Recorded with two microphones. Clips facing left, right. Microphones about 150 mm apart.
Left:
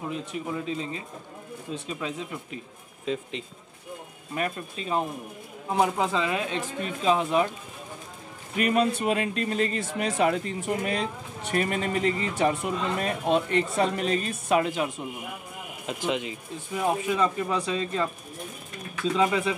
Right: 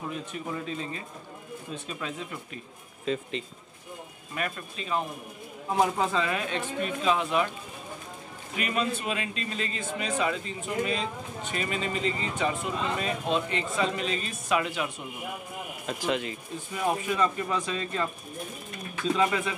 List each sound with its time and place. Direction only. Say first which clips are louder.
0.1 s speech: left 3 dB; 20° left (ahead or behind)
4.4 s speech: left 3 dB; 30° left (ahead or behind)
5.8 s speech: left 1 dB; 15° left (ahead or behind)
6.8 s speech: left 2 dB; 35° left (ahead or behind)
8.5 s a man's voice: left 6 dB; 45° left (ahead or behind)
15.9 s speech: left 1 dB; 15° left (ahead or behind)
19.1 s speech: left 3 dB; 20° left (ahead or behind)